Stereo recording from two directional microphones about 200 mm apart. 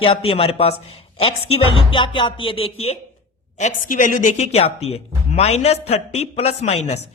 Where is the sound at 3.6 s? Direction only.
40° left (ahead or behind).